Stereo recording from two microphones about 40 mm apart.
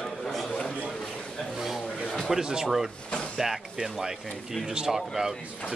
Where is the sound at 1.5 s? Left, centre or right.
Centre.